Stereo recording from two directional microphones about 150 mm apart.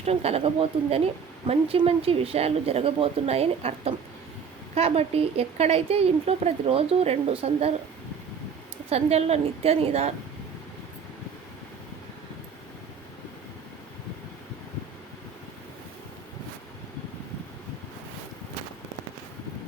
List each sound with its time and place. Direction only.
0.0 s a woman's voice: 45° right (ahead or behind)
8.9 s a woman's voice: 45° right (ahead or behind)